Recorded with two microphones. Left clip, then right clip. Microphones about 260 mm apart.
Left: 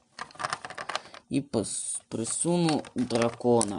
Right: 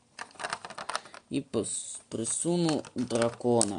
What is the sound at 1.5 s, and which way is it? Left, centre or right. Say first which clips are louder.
Speech: left 2 dB; left.